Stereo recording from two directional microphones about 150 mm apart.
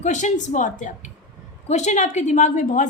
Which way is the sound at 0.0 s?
55° left (ahead or behind).